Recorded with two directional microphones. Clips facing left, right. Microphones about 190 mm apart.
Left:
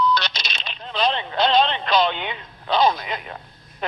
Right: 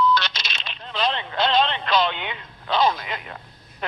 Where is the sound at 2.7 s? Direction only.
15° left (ahead or behind).